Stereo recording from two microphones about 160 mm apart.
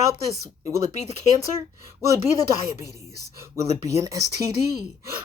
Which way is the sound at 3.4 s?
20° right (ahead or behind).